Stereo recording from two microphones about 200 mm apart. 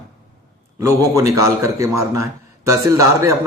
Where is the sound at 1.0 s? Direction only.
15° right (ahead or behind).